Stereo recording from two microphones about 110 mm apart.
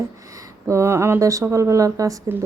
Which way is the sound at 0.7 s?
25° right (ahead or behind).